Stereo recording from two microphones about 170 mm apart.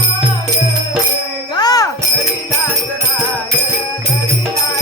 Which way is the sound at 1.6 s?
20° left (ahead or behind).